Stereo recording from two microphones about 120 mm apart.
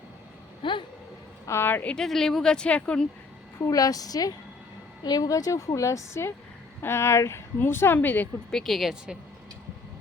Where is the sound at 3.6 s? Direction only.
30° left (ahead or behind); by 8.3 s 15° left (ahead or behind).